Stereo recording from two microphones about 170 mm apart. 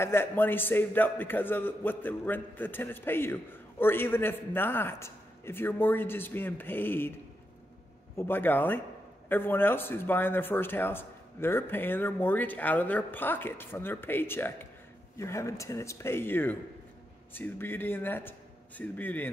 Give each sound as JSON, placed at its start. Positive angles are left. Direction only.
{"t": 0.0, "sound": "speech", "side_deg": 15}
{"t": 8.2, "sound": "speech", "side_deg": 10}